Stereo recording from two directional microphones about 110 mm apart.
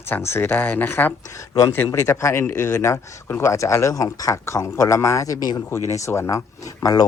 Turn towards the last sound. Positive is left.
turn(degrees=35)  # may be behind; listen again after turning